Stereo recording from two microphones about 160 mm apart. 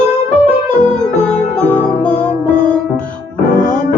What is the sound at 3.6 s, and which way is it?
Music, 50° left (ahead or behind).